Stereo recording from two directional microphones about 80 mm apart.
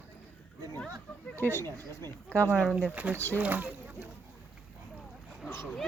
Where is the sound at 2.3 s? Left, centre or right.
Centre.